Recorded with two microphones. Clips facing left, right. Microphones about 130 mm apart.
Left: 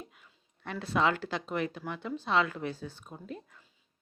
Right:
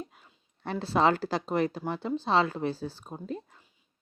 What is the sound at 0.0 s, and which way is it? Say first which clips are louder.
Speech: right 6 dB; 35° right (ahead or behind).